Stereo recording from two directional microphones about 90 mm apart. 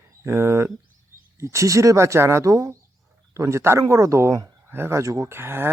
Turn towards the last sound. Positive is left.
turn(degrees=-25)  # may be behind; listen again after turning